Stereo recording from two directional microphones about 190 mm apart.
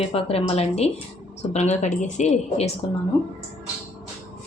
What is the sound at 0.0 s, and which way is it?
A woman's voice, 30° left (ahead or behind).